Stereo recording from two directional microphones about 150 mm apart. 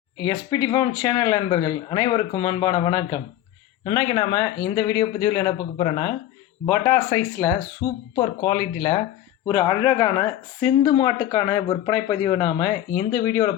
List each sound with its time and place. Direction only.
0.2 s speech: 25° left (ahead or behind)
9.5 s speech: 20° left (ahead or behind)